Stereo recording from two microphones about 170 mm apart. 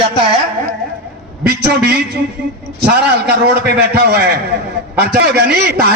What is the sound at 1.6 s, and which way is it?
A man's voice, 80° right.